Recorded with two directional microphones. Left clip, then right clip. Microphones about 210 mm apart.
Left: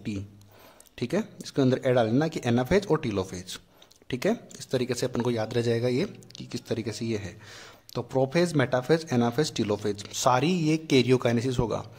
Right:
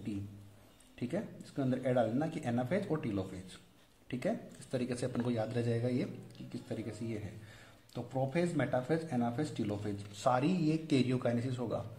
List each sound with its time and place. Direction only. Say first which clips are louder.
0.9 s speech: left 10 dB; 30° left (ahead or behind)